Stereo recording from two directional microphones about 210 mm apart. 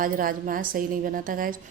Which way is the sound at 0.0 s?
40° right (ahead or behind).